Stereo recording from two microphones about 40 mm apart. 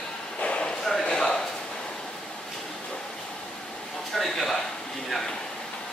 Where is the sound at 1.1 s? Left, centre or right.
Centre.